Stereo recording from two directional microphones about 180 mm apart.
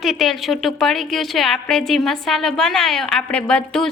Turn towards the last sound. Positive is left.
turn(degrees=5)  # may be behind; listen again after turning